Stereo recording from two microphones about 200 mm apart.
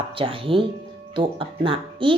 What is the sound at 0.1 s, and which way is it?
Speech, 25° right (ahead or behind).